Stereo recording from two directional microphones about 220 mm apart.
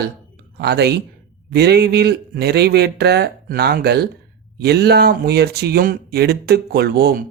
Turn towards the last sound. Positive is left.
turn(degrees=-45)  # may be behind; listen again after turning